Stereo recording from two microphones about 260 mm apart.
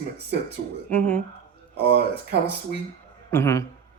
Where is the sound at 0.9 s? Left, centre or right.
Centre.